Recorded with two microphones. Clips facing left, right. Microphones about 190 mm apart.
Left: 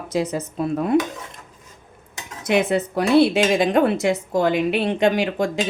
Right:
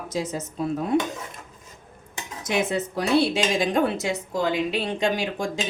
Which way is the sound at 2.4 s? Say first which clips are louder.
Left 5 dB; 60° left (ahead or behind).